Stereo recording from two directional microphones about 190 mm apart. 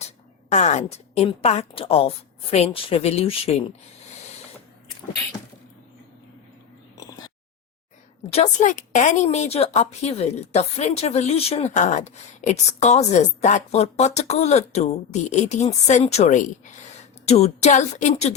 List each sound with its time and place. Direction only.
0.5 s a woman's voice: 35° left (ahead or behind)
8.3 s a woman's voice: 35° left (ahead or behind)